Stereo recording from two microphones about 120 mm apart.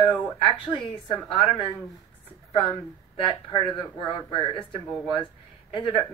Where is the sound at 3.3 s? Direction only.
50° left (ahead or behind).